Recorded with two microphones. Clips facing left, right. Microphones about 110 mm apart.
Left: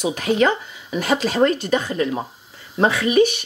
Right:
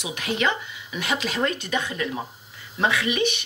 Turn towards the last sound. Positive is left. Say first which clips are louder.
# left 8 dB
turn(degrees=40)  # may be behind; listen again after turning